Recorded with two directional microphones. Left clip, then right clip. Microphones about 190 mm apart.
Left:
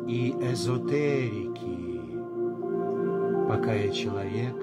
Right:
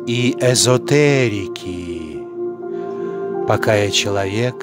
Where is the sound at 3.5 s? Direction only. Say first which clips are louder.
Right 12 dB; 50° right (ahead or behind).